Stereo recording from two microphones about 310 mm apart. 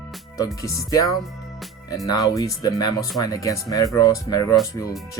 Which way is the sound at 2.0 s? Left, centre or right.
Centre.